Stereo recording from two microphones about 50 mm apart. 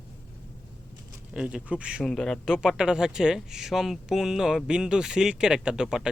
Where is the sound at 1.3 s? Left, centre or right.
Centre.